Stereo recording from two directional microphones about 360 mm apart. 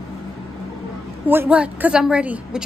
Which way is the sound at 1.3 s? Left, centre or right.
Centre.